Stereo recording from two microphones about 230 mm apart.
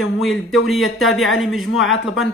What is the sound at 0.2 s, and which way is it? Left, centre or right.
Speech, centre.